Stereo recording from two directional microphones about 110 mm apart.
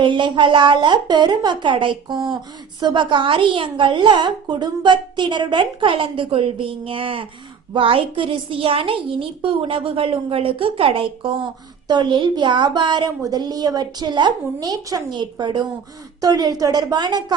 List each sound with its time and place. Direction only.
0.0 s a woman's voice: 45° right (ahead or behind)